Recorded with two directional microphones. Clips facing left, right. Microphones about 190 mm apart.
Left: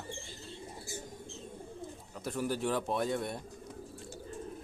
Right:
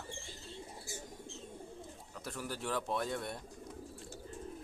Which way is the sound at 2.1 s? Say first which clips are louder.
Left 8 dB; 20° left (ahead or behind).